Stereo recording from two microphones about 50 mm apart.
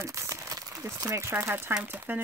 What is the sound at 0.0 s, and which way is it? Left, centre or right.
Crumpling, right.